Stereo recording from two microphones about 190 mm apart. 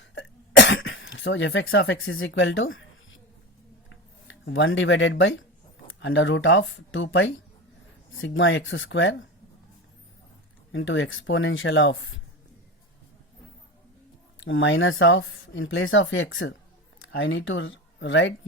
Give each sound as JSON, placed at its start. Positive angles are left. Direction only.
{"t": 0.0, "sound": "cough", "side_deg": 75}
{"t": 4.3, "sound": "speech", "side_deg": 80}
{"t": 10.7, "sound": "speech", "side_deg": 85}
{"t": 14.3, "sound": "speech", "side_deg": 80}